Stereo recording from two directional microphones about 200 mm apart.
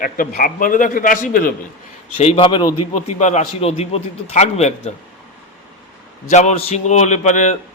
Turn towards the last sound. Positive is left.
turn(degrees=35)  # may be behind; listen again after turning